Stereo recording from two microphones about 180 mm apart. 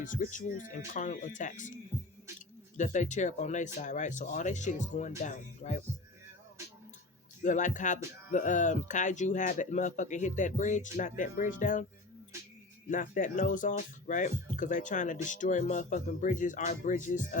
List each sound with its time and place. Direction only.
0.0 s speech: 45° left (ahead or behind)
2.7 s speech: 45° left (ahead or behind)
7.4 s speech: 45° left (ahead or behind)
12.9 s speech: 45° left (ahead or behind)